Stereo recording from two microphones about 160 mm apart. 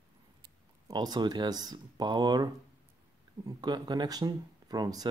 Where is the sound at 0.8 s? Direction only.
25° right (ahead or behind).